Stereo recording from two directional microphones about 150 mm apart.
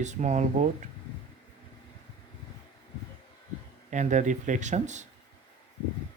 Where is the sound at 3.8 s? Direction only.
55° right (ahead or behind).